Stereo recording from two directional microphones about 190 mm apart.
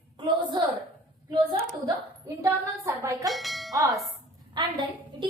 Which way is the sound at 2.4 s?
15° right (ahead or behind).